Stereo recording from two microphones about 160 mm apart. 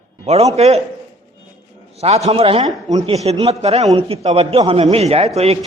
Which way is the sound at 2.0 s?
40° right (ahead or behind).